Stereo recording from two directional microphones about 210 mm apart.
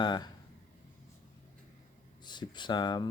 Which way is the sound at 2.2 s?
20° left (ahead or behind).